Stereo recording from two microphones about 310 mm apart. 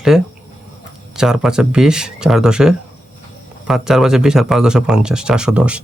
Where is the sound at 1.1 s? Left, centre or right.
Centre.